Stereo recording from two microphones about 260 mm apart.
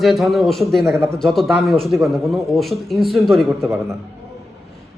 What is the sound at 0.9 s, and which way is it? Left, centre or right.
Speech, centre.